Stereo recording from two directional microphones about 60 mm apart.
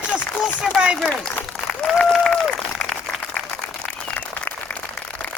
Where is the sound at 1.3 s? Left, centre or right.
Centre.